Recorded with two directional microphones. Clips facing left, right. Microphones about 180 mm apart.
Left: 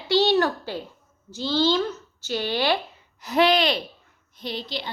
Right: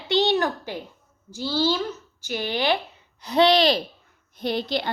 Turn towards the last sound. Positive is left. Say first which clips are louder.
# right 6 dB
turn(degrees=-55)  # may be behind; listen again after turning